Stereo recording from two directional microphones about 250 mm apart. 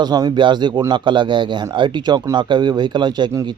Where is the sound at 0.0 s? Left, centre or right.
Centre.